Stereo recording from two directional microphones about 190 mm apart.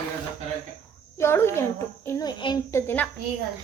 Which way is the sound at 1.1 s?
15° left (ahead or behind).